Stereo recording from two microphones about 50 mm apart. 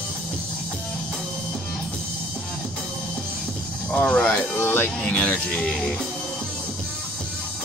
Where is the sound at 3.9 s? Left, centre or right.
Centre.